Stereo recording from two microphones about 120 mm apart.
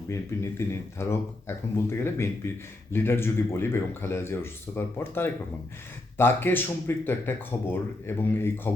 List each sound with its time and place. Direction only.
0.7 s speech: 20° left (ahead or behind)